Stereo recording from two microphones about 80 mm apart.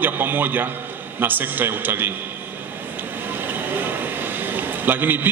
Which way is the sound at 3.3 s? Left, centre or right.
Right.